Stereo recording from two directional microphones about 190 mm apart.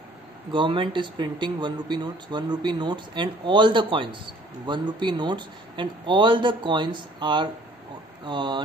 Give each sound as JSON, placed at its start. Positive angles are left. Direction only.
{"t": 0.5, "sound": "speech", "side_deg": -25}